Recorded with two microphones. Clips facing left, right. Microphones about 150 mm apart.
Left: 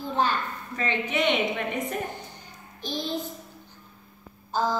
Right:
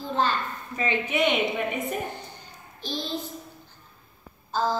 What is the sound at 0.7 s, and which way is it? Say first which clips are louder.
A woman's voice: right 2 dB; 10° right (ahead or behind).